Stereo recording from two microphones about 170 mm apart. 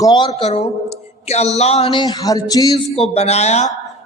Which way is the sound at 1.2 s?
40° left (ahead or behind).